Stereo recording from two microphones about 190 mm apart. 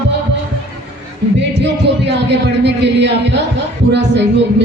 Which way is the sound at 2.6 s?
65° right (ahead or behind).